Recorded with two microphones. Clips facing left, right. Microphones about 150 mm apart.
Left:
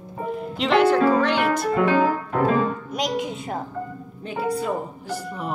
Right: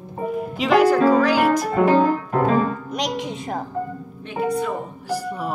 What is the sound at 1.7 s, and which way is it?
Music, 35° right (ahead or behind).